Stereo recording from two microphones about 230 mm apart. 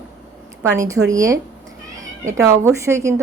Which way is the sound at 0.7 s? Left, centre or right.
Centre.